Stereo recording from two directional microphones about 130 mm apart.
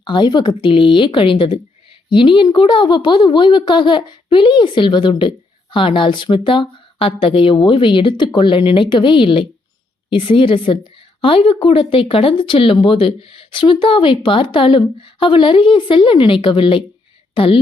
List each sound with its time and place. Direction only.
0.0 s speech: 35° left (ahead or behind)